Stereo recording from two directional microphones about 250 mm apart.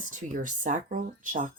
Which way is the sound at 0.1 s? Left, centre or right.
Right.